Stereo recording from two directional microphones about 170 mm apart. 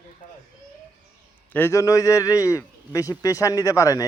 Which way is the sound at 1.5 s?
15° left (ahead or behind).